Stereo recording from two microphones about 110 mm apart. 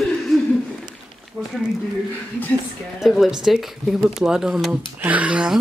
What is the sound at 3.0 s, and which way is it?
Speech, 5° right (ahead or behind).